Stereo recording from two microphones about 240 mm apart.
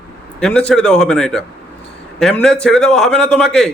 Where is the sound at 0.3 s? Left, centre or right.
Centre.